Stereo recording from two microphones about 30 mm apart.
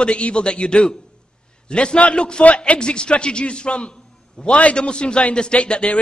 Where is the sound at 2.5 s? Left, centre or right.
Left.